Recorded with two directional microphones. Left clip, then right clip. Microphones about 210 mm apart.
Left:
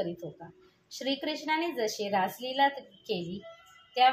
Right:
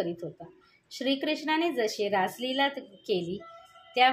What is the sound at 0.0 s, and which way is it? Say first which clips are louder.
A woman's voice: right 2 dB; 40° right (ahead or behind).